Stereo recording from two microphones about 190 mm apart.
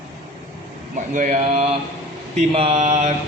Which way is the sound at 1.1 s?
40° right (ahead or behind).